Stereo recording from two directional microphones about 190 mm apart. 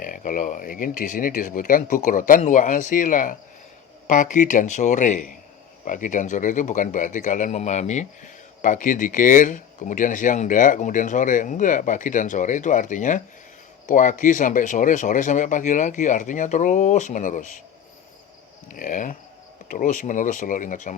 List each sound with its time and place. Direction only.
0.0 s speech: 45° left (ahead or behind)
18.7 s speech: 45° left (ahead or behind)